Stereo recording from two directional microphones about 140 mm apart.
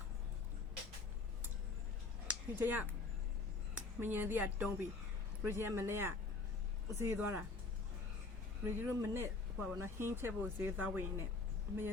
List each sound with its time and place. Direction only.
2.2 s a sound: 10° right (ahead or behind)
3.8 s speech: 15° right (ahead or behind)
8.6 s speech: 20° right (ahead or behind)